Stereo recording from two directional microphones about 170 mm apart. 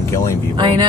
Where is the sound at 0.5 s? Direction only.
25° right (ahead or behind).